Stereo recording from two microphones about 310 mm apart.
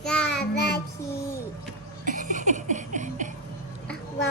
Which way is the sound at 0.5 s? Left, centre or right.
Left.